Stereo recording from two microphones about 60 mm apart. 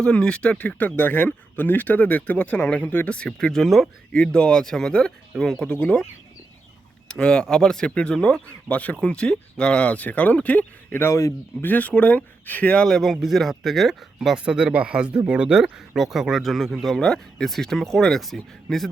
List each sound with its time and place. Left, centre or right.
0.0 s speech: centre
3.3 s speech: centre
4.1 s speech: centre
7.1 s speech: centre
11.1 s speech: left
11.6 s speech: left
12.8 s speech: centre
14.3 s speech: centre